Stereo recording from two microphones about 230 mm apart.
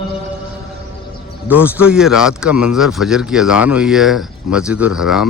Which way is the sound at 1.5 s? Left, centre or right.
Centre.